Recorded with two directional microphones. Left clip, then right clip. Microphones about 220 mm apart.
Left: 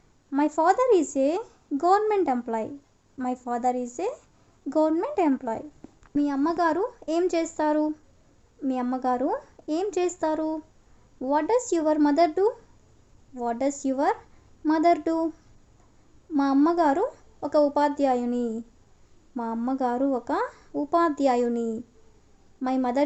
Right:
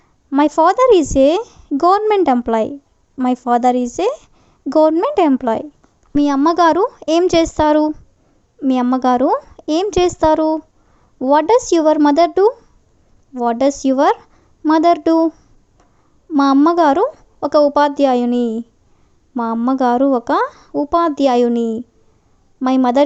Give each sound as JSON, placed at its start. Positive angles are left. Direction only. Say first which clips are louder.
{"t": 0.3, "sound": "a woman's voice", "louder": "right 10 dB", "side_deg": -40}